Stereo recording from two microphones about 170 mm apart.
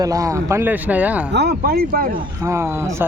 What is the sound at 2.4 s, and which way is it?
Speech, 15° right (ahead or behind).